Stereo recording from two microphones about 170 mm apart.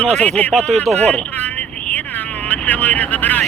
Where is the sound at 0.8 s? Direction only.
5° left (ahead or behind).